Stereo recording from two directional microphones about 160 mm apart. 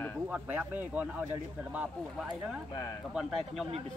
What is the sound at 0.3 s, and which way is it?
Speech, 10° right (ahead or behind).